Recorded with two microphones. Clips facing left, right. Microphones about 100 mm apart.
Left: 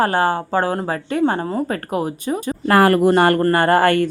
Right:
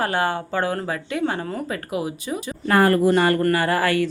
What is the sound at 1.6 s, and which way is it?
A woman's voice, 45° left (ahead or behind).